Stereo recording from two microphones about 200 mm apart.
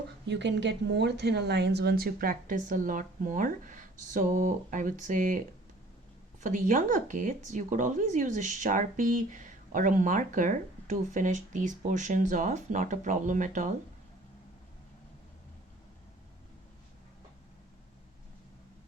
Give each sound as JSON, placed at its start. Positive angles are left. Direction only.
{"t": 0.3, "sound": "speech", "side_deg": -60}
{"t": 6.4, "sound": "speech", "side_deg": -40}